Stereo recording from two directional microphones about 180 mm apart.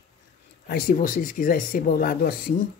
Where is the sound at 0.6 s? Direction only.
55° left (ahead or behind).